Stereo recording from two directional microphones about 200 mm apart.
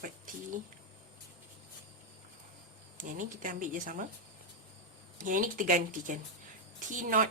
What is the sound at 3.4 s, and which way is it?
Speech, 40° right (ahead or behind).